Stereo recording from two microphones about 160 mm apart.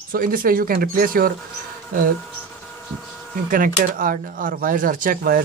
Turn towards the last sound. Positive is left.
turn(degrees=-60)  # may be behind; listen again after turning